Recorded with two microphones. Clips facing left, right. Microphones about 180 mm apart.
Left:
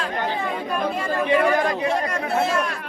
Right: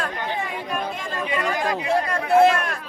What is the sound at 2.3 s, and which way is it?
Speech, 60° right (ahead or behind).